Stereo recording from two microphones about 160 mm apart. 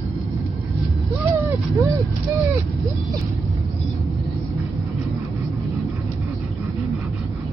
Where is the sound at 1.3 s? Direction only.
20° right (ahead or behind).